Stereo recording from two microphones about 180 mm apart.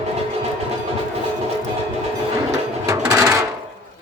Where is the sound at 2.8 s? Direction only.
15° right (ahead or behind).